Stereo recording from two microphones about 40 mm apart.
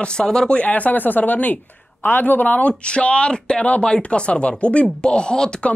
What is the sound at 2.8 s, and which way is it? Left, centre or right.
Speech, left.